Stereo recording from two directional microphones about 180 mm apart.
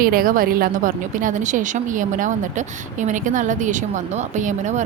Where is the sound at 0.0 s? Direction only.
55° right (ahead or behind).